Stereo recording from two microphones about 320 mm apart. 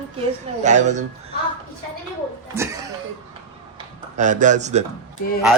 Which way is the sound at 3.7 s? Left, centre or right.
Right.